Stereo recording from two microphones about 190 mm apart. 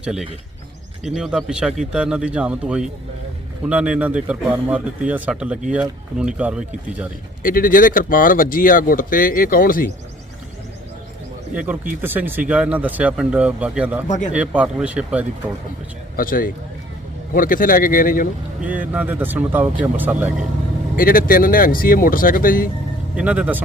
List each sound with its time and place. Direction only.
0.0 s speech: 5° right (ahead or behind)
7.4 s speech: 45° left (ahead or behind)
11.5 s speech: 10° right (ahead or behind)
16.1 s speech: 50° left (ahead or behind)
18.6 s speech: 10° right (ahead or behind)
20.9 s speech: 45° left (ahead or behind)
23.1 s speech: 5° right (ahead or behind)